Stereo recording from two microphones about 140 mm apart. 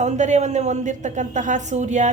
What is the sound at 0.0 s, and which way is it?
A woman's voice, 55° right (ahead or behind).